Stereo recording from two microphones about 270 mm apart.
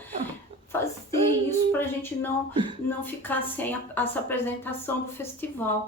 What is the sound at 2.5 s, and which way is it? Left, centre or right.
Speech, centre.